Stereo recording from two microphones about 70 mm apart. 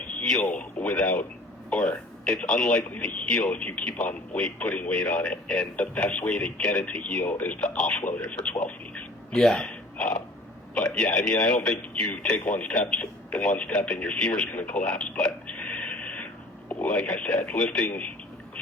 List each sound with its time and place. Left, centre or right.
0.3 s a man's voice: centre
9.3 s a man's voice: centre